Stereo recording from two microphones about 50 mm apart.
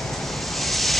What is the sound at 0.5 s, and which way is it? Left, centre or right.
Waves, centre.